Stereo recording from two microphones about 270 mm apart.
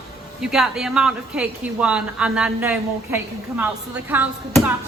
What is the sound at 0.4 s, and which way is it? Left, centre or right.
A woman's voice, centre.